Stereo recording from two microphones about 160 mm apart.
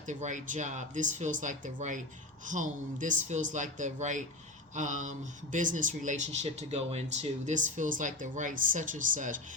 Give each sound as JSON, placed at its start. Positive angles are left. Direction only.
{"t": 0.0, "sound": "speech", "side_deg": -50}